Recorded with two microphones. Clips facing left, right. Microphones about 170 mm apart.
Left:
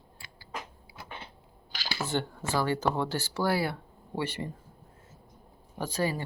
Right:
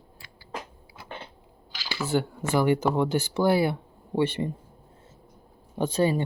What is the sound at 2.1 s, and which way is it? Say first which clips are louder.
Speech: right 6 dB; 5° right (ahead or behind).